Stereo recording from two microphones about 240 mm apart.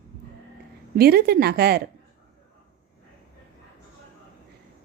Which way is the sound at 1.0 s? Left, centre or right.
Right.